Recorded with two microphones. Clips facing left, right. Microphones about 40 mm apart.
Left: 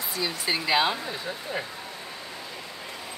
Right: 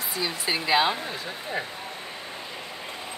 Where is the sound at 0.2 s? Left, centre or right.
Centre.